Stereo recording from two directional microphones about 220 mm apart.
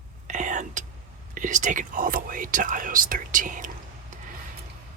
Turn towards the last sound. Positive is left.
turn(degrees=-35)  # may be behind; listen again after turning